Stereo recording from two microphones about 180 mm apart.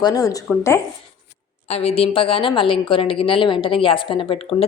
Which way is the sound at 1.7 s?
35° left (ahead or behind).